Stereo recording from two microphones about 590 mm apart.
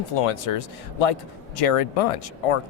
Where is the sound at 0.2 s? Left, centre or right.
Left.